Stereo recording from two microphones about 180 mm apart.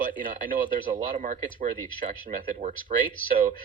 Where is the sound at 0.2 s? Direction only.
50° right (ahead or behind).